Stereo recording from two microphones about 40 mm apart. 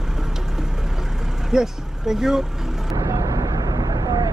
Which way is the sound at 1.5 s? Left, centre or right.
Centre.